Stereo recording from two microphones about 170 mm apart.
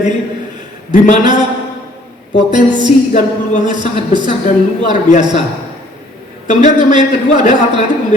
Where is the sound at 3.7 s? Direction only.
25° right (ahead or behind).